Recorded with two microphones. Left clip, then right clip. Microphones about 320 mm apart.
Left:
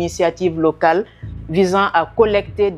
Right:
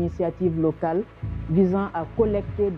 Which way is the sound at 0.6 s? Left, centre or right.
Centre.